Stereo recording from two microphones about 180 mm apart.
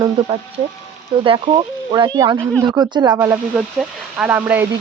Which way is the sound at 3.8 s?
5° right (ahead or behind).